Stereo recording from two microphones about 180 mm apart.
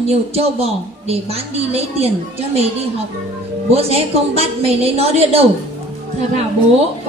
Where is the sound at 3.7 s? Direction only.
35° right (ahead or behind).